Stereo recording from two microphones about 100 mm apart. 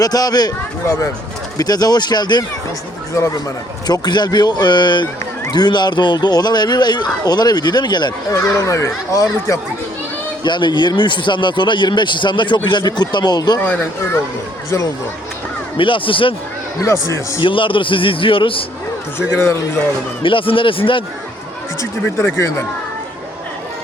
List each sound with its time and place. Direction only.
0.0 s a child's voice: 40° left (ahead or behind)
3.2 s a child's voice: 30° left (ahead or behind)
3.8 s speech: 40° left (ahead or behind)
8.4 s a child's voice: 30° left (ahead or behind)
10.4 s speech: 50° left (ahead or behind)
13.6 s speech: 15° left (ahead or behind)
15.8 s a man's voice: 60° left (ahead or behind)
16.8 s speech: 30° left (ahead or behind)
17.4 s a man's voice: 60° left (ahead or behind)
20.2 s a man's voice: 60° left (ahead or behind)
22.0 s speech: 20° left (ahead or behind)